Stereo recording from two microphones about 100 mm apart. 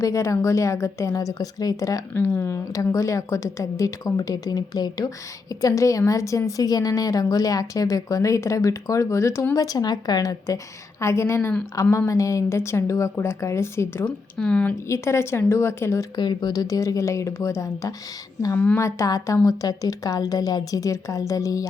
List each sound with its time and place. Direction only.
0.0 s a woman's voice: 30° left (ahead or behind)
2.1 s a woman's voice: 20° left (ahead or behind)
9.6 s a woman's voice: 45° left (ahead or behind); by 14.0 s 25° left (ahead or behind)
14.0 s speech: 10° left (ahead or behind)
14.8 s a woman's voice: 30° left (ahead or behind)
16.1 s a woman's voice: 45° left (ahead or behind)
18.5 s speech: 15° left (ahead or behind)
18.8 s a woman's voice: 30° left (ahead or behind)